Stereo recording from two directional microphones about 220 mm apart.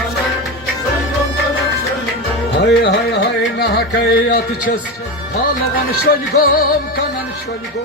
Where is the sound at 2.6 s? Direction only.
50° left (ahead or behind).